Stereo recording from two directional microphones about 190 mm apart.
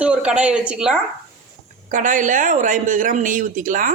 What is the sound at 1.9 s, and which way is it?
Speech, 40° right (ahead or behind).